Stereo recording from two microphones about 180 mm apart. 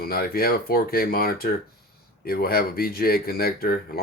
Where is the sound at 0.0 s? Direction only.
55° left (ahead or behind).